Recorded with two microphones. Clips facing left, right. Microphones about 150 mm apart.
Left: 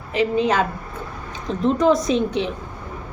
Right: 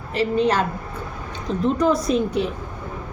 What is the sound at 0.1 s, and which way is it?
Speech, centre (ahead or behind).